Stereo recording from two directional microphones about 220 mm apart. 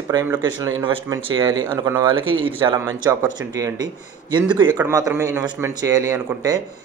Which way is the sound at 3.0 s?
5° right (ahead or behind).